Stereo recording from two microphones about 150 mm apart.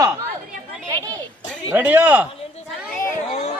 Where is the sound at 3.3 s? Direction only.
45° left (ahead or behind).